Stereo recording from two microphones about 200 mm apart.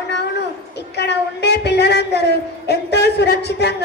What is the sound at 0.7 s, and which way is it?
A woman's voice, 55° left (ahead or behind).